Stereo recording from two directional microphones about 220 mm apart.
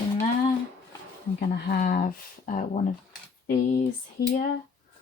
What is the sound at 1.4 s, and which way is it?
Speech, 45° left (ahead or behind).